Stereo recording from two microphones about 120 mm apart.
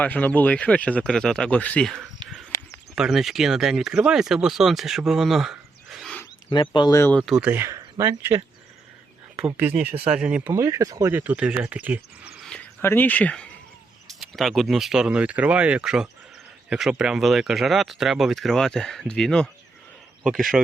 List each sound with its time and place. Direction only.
0.0 s speech: 10° left (ahead or behind)
6.5 s speech: 40° left (ahead or behind)
7.1 s speech: 5° left (ahead or behind)
7.4 s speech: 20° right (ahead or behind)
9.6 s speech: 15° right (ahead or behind)
10.5 s speech: 25° right (ahead or behind)
12.8 s a man's voice: 15° left (ahead or behind); by 20.6 s centre (ahead or behind)